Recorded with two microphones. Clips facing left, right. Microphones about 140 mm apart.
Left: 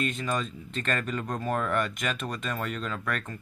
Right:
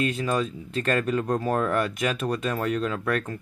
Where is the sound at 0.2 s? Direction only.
40° right (ahead or behind).